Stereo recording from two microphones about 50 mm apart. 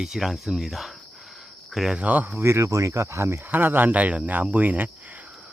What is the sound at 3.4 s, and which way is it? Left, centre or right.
Speech, right.